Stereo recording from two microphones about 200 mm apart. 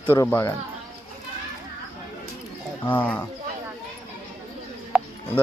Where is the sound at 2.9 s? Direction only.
5° left (ahead or behind).